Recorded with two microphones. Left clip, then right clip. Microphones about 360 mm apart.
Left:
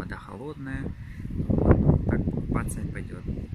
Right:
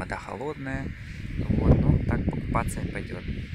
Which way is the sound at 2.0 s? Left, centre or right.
Centre.